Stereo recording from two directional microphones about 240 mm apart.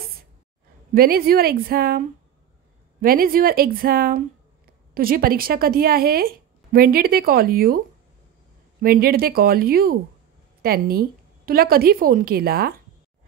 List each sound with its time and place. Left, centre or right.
0.9 s a woman's voice: right
8.8 s a woman's voice: right